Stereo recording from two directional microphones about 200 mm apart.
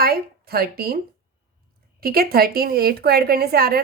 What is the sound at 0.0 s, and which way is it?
Speech, 50° right (ahead or behind).